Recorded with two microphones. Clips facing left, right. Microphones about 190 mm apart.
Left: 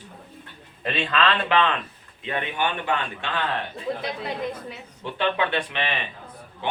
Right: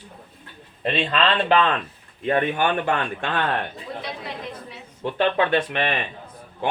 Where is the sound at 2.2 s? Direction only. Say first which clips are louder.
Right 6 dB; 45° right (ahead or behind).